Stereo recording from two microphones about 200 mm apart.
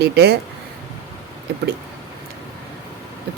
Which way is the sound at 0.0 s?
55° right (ahead or behind).